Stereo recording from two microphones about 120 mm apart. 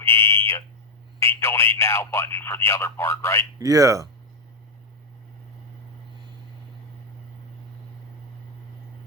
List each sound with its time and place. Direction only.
0.0 s a sound: 20° left (ahead or behind)
1.2 s speech: 20° left (ahead or behind)
3.6 s speech: 30° right (ahead or behind)